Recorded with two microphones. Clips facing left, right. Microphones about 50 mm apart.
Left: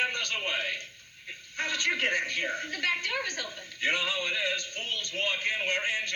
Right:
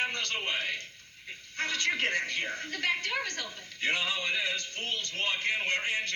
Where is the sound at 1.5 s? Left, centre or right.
Left.